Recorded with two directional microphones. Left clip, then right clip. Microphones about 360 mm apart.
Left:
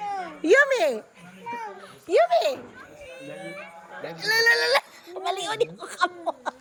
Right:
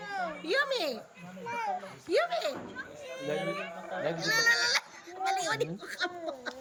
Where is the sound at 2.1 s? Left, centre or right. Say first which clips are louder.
Left 9 dB; centre.